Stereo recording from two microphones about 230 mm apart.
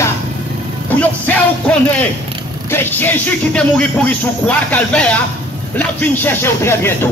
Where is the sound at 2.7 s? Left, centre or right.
Centre.